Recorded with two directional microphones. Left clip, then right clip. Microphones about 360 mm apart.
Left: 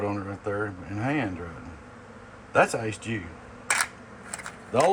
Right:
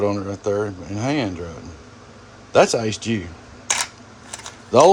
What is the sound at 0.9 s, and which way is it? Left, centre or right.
Speech, centre.